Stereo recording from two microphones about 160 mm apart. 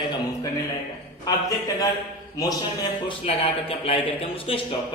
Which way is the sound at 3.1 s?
35° left (ahead or behind).